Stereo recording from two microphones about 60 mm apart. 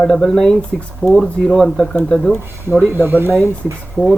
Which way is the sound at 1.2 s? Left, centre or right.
Centre.